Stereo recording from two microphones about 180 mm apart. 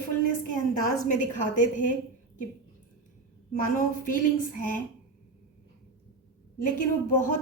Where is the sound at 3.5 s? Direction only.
45° left (ahead or behind).